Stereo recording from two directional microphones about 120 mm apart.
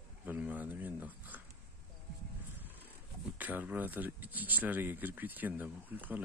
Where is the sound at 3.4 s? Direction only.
15° right (ahead or behind).